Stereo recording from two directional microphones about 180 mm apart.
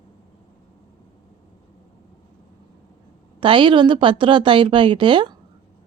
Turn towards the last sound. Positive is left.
turn(degrees=-25)  # may be behind; listen again after turning